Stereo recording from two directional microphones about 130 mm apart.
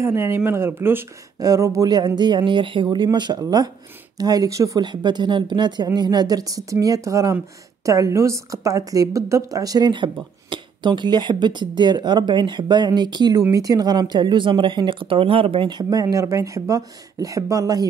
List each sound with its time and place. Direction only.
0.0 s a woman's voice: 20° right (ahead or behind)